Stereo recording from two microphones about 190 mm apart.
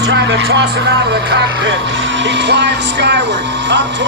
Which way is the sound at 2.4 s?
65° right (ahead or behind).